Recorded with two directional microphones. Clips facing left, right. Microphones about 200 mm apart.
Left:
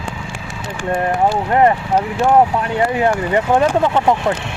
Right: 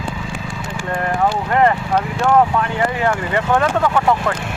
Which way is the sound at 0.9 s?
20° left (ahead or behind).